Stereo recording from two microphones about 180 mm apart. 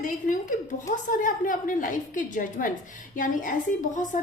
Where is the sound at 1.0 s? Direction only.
45° left (ahead or behind).